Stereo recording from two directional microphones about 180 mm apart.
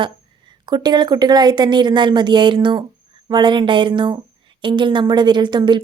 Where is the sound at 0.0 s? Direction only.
25° right (ahead or behind).